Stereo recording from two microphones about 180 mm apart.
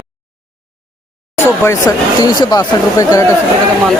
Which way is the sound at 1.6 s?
15° left (ahead or behind).